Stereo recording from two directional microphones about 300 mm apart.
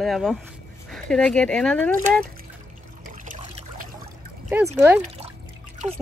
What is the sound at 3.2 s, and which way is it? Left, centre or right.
Trickle, right.